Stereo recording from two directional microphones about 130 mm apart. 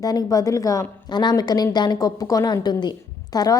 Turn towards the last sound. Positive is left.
turn(degrees=30)  # may be behind; listen again after turning